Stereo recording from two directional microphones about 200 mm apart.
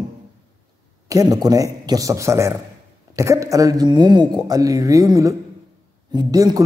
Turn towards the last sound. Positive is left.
turn(degrees=-20)  # may be behind; listen again after turning